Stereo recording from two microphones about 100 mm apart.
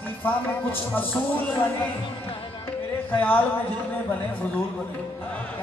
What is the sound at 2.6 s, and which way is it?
Music, 20° left (ahead or behind).